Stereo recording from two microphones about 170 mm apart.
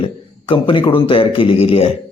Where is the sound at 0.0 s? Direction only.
30° left (ahead or behind).